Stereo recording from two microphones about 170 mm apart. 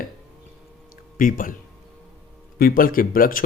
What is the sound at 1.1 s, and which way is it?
Speech, 55° left (ahead or behind).